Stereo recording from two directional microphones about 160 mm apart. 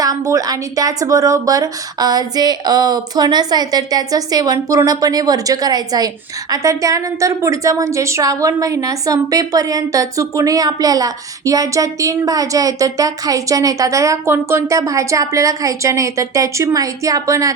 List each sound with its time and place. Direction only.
0.0 s a woman's voice: 20° right (ahead or behind)